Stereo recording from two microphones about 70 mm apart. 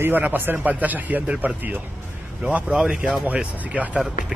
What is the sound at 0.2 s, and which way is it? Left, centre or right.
Speech, right.